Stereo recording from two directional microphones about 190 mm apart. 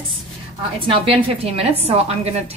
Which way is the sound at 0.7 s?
30° right (ahead or behind).